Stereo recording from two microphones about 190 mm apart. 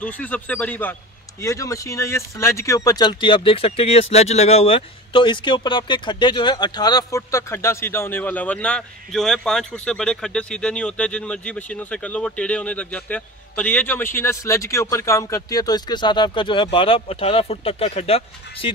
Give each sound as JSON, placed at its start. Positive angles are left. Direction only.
{"t": 0.2, "sound": "speech", "side_deg": 5}